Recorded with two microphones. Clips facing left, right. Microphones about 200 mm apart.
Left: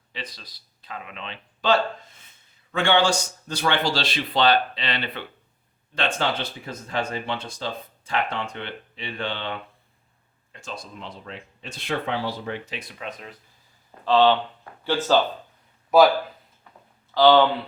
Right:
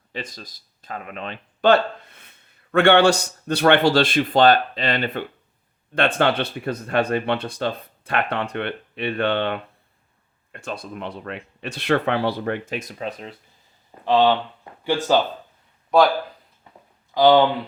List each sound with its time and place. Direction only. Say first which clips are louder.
0.1 s speech: right 5 dB; 45° right (ahead or behind)
5.9 s speech: right 6 dB; 55° right (ahead or behind); by 13.3 s 30° right (ahead or behind)
14.0 s speech: right 1 dB; 15° right (ahead or behind)
15.9 s speech: left 1 dB; 5° left (ahead or behind)
16.7 s a sound: right 3 dB; 20° right (ahead or behind)
17.2 s speech: right 1 dB; 15° right (ahead or behind)